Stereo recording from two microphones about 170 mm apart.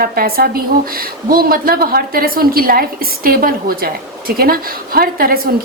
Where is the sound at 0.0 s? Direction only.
60° right (ahead or behind).